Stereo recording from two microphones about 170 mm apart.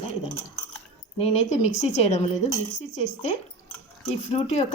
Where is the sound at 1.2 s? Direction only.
40° left (ahead or behind).